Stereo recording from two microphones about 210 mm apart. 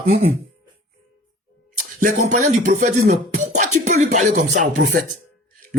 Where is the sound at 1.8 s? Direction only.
35° right (ahead or behind).